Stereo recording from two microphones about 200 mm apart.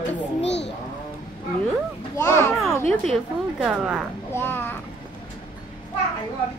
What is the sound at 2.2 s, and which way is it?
A child's voice, 10° left (ahead or behind).